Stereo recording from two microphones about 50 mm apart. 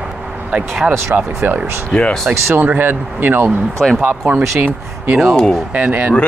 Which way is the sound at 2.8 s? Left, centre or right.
Right.